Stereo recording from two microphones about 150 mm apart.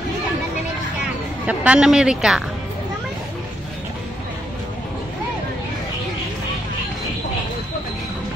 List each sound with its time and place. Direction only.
1.4 s a woman's voice: 10° right (ahead or behind)